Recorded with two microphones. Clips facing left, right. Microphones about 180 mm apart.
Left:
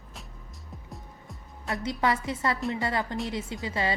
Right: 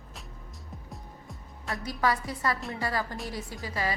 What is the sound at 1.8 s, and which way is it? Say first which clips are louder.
A woman's voice: left 1 dB; 25° left (ahead or behind).